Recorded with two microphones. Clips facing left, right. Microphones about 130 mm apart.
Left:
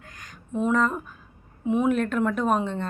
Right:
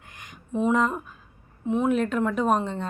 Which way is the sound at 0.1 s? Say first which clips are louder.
Right 4 dB; 20° right (ahead or behind).